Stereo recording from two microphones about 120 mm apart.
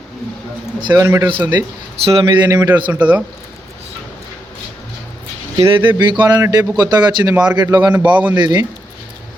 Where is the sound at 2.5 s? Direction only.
30° right (ahead or behind).